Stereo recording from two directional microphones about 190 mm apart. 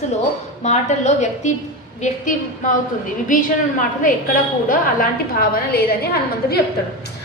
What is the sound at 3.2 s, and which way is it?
A woman's voice, 45° left (ahead or behind).